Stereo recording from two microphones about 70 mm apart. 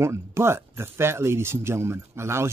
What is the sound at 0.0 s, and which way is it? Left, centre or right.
Speech, right.